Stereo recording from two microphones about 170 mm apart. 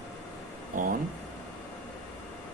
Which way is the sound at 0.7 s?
55° right (ahead or behind).